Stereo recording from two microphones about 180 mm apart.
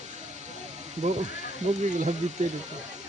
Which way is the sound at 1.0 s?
40° right (ahead or behind).